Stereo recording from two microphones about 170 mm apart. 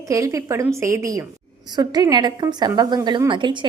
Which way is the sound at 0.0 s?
20° right (ahead or behind).